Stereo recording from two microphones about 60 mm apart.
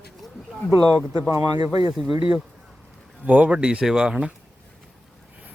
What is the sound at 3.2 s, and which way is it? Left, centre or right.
Speech, right.